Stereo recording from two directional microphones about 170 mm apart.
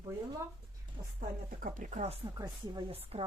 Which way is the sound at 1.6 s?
50° right (ahead or behind).